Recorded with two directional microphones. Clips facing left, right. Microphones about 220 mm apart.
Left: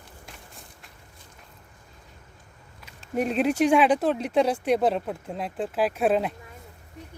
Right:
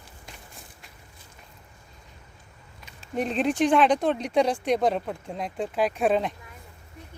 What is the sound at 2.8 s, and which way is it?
Speech, 5° left (ahead or behind).